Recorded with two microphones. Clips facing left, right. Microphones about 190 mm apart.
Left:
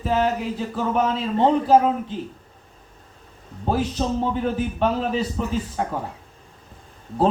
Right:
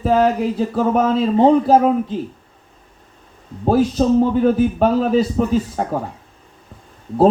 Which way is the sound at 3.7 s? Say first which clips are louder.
Right 8 dB; 40° right (ahead or behind).